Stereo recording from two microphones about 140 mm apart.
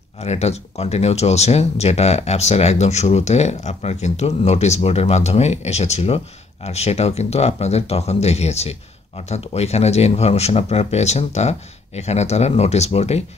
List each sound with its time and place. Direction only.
0.2 s speech: 50° left (ahead or behind)